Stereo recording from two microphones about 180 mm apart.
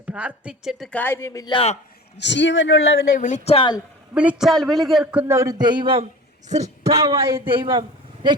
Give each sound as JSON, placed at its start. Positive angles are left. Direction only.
{"t": 0.0, "sound": "a woman's voice", "side_deg": -5}
{"t": 2.1, "sound": "speech", "side_deg": 75}
{"t": 3.2, "sound": "speech", "side_deg": 45}
{"t": 4.1, "sound": "a woman's voice", "side_deg": -5}
{"t": 5.3, "sound": "a man's voice", "side_deg": -20}